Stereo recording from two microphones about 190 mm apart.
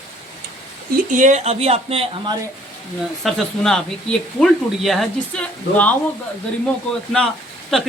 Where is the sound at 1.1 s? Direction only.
40° right (ahead or behind).